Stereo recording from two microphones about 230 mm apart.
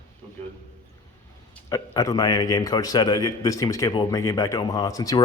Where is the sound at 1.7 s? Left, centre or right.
Centre.